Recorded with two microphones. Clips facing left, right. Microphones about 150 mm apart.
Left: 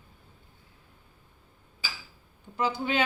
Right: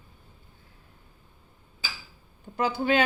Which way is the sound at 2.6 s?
50° right (ahead or behind).